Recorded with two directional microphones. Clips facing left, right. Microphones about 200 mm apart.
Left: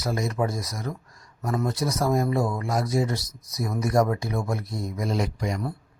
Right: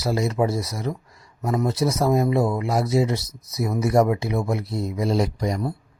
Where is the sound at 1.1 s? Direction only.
5° right (ahead or behind).